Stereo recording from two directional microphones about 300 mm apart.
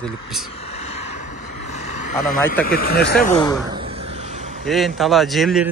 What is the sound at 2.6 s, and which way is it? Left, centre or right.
Speech, left.